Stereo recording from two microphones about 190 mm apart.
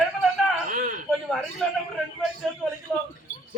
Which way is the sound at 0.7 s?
45° right (ahead or behind).